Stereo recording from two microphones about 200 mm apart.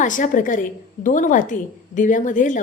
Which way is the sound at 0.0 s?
40° left (ahead or behind).